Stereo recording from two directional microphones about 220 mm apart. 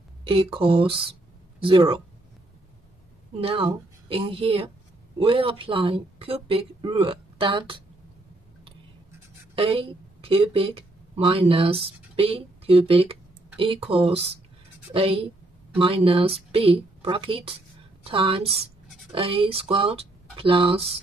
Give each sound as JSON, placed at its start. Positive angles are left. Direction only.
{"t": 0.2, "sound": "speech", "side_deg": -25}
{"t": 3.3, "sound": "speech", "side_deg": -25}
{"t": 9.6, "sound": "a woman's voice", "side_deg": -25}
{"t": 15.8, "sound": "speech", "side_deg": -25}